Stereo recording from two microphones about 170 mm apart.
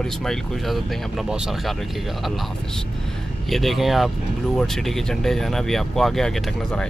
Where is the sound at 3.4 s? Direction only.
Centre (ahead or behind).